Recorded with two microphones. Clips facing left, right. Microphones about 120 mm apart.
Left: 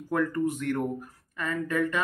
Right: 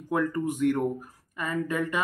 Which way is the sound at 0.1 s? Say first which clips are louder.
Even; 15° right (ahead or behind).